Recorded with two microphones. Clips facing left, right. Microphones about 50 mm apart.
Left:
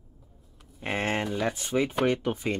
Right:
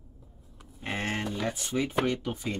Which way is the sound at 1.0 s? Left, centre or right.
Centre.